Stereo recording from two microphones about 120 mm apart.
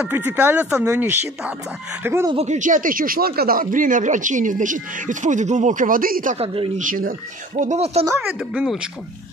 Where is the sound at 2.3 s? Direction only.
80° right.